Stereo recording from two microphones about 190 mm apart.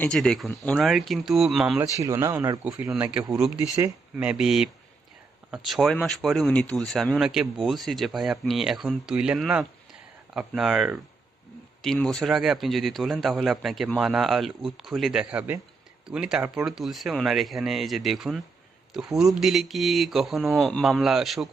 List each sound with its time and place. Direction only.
0.0 s speech: 5° left (ahead or behind)
1.8 s speech: 15° right (ahead or behind)
4.2 s speech: 5° right (ahead or behind)